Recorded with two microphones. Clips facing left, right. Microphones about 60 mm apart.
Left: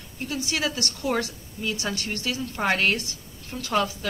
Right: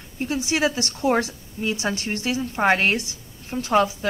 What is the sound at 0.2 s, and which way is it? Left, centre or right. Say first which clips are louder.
A woman's voice: right 6 dB; right.